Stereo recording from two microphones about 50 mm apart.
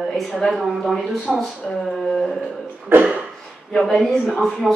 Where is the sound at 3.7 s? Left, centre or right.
Centre.